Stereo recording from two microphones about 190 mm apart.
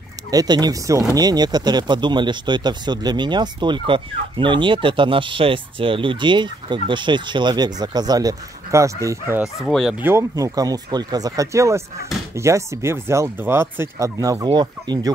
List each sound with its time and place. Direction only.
0.3 s speech: 20° right (ahead or behind)
9.4 s speech: centre (ahead or behind)
10.0 s speech: 15° right (ahead or behind)